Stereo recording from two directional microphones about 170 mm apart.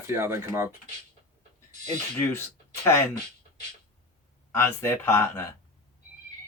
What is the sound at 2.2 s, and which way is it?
Speech, 15° left (ahead or behind).